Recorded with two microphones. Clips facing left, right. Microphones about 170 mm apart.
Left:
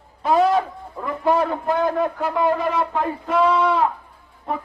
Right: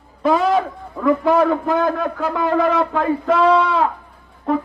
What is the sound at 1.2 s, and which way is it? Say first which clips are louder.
A man's voice: left 1 dB; 90° right.